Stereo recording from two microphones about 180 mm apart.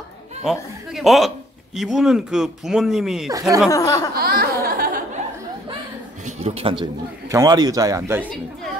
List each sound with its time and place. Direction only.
0.5 s speech: centre (ahead or behind)
3.7 s speech: 20° left (ahead or behind)
4.1 s speech: 60° right (ahead or behind)
6.2 s a man's voice: 35° right (ahead or behind); by 8.3 s 15° right (ahead or behind)